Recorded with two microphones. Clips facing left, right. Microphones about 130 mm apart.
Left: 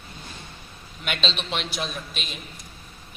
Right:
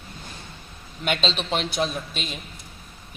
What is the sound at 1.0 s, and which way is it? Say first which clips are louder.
A man's voice: right 4 dB; 35° right (ahead or behind).